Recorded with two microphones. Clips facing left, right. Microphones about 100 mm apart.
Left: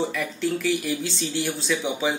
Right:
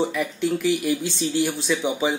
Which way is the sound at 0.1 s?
10° right (ahead or behind).